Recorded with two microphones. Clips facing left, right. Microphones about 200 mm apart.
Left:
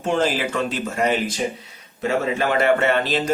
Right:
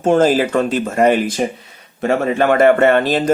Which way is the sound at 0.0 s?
45° right (ahead or behind).